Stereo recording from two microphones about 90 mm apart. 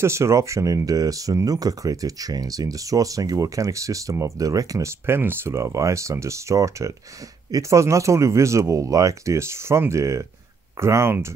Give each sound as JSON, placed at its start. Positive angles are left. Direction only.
{"t": 0.0, "sound": "speech", "side_deg": -30}
{"t": 5.0, "sound": "speech", "side_deg": -25}